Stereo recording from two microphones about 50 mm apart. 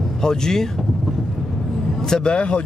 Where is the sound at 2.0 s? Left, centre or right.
Centre.